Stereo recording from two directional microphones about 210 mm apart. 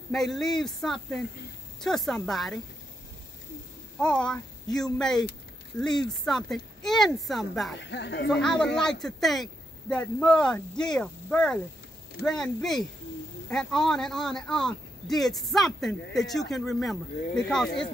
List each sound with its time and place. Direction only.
0.1 s speech: centre (ahead or behind)
4.0 s speech: 5° left (ahead or behind)
7.8 s speech: 55° left (ahead or behind)
8.3 s speech: 5° left (ahead or behind)